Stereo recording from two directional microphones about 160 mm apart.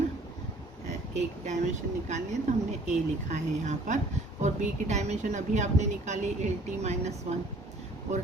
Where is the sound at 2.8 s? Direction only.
45° right (ahead or behind).